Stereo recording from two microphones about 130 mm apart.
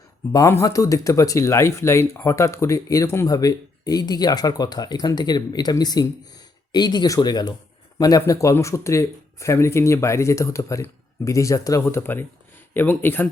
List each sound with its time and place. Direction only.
0.3 s speech: 25° left (ahead or behind)